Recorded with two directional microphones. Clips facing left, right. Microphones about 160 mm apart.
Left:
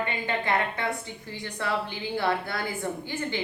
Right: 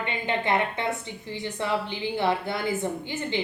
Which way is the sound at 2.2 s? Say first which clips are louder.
Right 2 dB; 20° right (ahead or behind).